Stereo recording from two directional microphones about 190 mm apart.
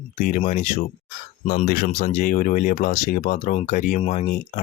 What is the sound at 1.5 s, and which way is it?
Speech, 50° left (ahead or behind).